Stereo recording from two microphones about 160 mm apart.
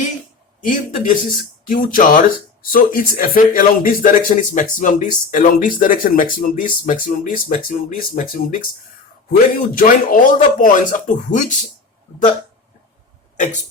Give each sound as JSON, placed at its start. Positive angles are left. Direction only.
{"t": 0.7, "sound": "speech", "side_deg": 55}
{"t": 9.7, "sound": "speech", "side_deg": 60}
{"t": 13.3, "sound": "speech", "side_deg": 50}